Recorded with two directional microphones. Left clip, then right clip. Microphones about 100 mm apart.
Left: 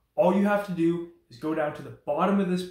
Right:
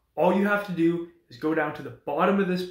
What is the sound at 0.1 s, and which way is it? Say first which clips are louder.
Speech: even; 15° left (ahead or behind).